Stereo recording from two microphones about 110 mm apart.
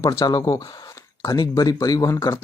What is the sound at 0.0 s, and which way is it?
Speech, 30° left (ahead or behind).